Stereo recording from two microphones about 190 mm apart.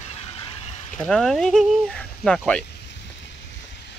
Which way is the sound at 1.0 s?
Centre (ahead or behind).